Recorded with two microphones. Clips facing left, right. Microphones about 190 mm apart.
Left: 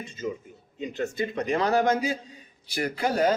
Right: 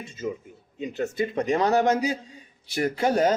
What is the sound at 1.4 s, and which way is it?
Speech, 20° right (ahead or behind).